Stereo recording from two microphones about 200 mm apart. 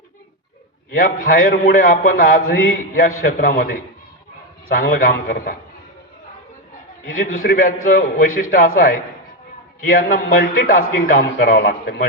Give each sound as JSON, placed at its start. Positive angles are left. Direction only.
{"t": 0.9, "sound": "a man's voice", "side_deg": 45}
{"t": 7.1, "sound": "a man's voice", "side_deg": 45}